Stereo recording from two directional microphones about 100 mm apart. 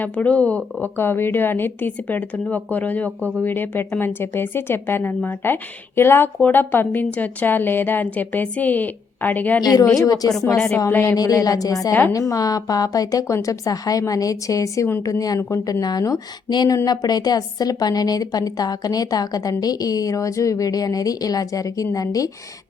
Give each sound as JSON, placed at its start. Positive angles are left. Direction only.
{"t": 0.0, "sound": "a woman's voice", "side_deg": 15}
{"t": 9.6, "sound": "a woman's voice", "side_deg": 40}
{"t": 10.8, "sound": "a woman's voice", "side_deg": 25}
{"t": 11.1, "sound": "a woman's voice", "side_deg": 40}